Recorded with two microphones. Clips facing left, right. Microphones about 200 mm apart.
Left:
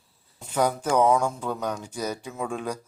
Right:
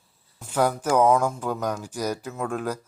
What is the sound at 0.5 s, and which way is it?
Speech, 10° right (ahead or behind).